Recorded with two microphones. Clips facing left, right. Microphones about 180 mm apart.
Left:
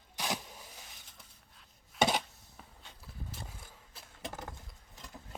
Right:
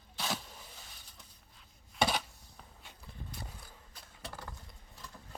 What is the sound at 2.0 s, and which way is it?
Chopping, 20° left (ahead or behind).